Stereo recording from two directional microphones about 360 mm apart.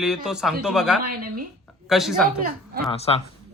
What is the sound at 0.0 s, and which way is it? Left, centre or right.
Speech, centre.